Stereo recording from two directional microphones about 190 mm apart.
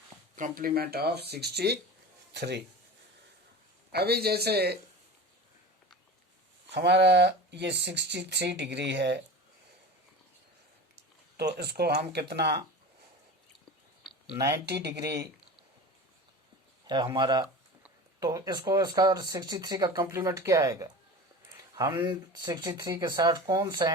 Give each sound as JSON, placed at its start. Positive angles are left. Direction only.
{"t": 0.3, "sound": "speech", "side_deg": -45}
{"t": 3.9, "sound": "speech", "side_deg": -55}
{"t": 6.7, "sound": "speech", "side_deg": -65}
{"t": 11.3, "sound": "speech", "side_deg": -55}
{"t": 14.3, "sound": "speech", "side_deg": -15}
{"t": 16.8, "sound": "speech", "side_deg": -20}